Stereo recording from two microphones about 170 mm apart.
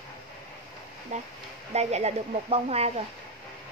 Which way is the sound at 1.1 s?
45° right (ahead or behind).